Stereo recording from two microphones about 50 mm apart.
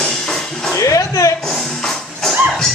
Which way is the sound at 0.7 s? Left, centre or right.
Left.